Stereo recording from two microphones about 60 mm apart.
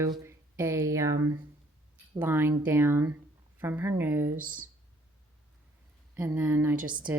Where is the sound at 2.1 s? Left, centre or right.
Right.